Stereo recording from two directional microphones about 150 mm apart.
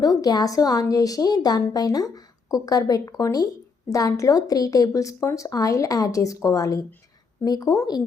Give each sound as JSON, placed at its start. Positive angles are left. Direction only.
{"t": 0.0, "sound": "a woman's voice", "side_deg": 25}